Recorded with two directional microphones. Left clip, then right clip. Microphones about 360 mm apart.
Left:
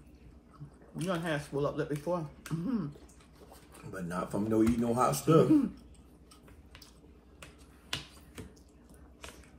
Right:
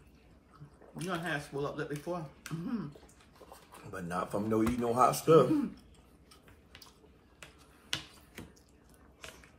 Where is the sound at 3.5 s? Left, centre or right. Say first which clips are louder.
Right 1 dB; centre.